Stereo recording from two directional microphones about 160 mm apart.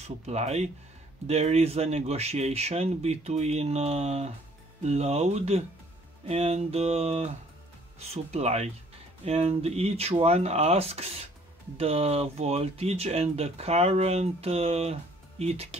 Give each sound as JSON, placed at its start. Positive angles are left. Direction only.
{"t": 0.3, "sound": "speech", "side_deg": -45}